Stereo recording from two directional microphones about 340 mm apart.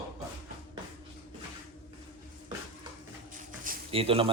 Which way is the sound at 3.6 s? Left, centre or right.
Centre.